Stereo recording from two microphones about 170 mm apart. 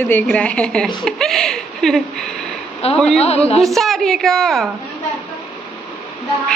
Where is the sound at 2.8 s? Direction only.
35° left (ahead or behind).